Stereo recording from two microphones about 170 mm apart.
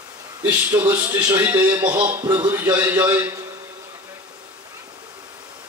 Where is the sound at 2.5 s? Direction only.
10° right (ahead or behind).